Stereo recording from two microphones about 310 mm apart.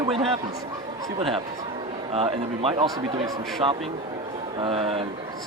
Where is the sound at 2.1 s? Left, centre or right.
Centre.